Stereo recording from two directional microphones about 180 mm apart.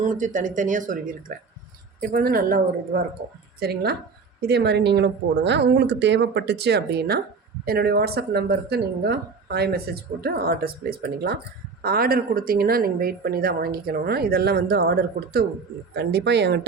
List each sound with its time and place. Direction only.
0.0 s speech: 45° right (ahead or behind); by 16.6 s 70° right (ahead or behind)